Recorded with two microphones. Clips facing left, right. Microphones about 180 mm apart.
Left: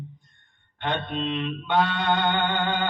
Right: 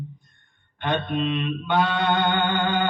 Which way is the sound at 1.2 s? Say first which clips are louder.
Right 2 dB; 20° left (ahead or behind).